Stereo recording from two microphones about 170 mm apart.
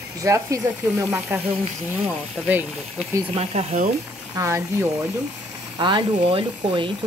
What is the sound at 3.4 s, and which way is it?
Speech, 45° right (ahead or behind).